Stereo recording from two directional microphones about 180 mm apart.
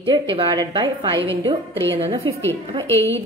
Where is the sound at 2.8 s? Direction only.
15° left (ahead or behind).